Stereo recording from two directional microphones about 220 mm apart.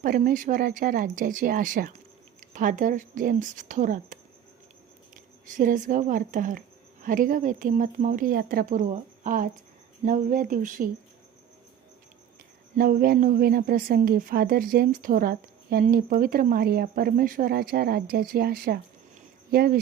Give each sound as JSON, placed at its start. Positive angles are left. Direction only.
{"t": 0.0, "sound": "a woman's voice", "side_deg": -40}
{"t": 12.7, "sound": "a woman's voice", "side_deg": -40}